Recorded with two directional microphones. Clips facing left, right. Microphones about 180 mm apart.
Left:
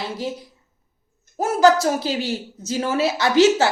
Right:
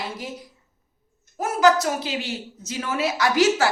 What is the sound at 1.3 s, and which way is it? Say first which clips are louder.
Speech: left 3 dB; 30° left (ahead or behind).